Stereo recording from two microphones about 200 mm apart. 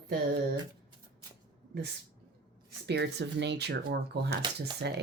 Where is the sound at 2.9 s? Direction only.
55° right (ahead or behind).